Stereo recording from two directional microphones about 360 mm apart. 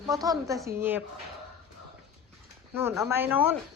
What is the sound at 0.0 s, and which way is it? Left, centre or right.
A woman's voice, centre.